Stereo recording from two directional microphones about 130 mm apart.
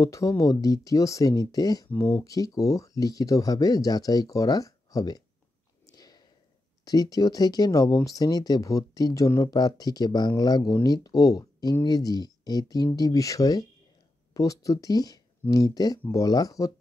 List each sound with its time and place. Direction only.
0.0 s speech: 25° left (ahead or behind)
5.9 s a sound: 30° left (ahead or behind)
6.8 s speech: 30° left (ahead or behind)